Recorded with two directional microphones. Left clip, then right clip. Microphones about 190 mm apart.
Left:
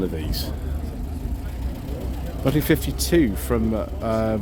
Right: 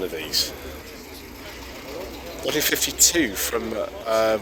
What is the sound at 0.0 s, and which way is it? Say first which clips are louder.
Speech: right 3 dB; 25° left (ahead or behind).